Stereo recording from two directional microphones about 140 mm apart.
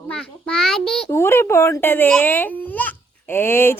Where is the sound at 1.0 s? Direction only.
20° left (ahead or behind).